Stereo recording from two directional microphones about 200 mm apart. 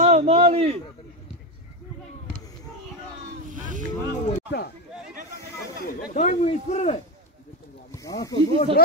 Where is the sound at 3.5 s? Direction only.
40° right (ahead or behind).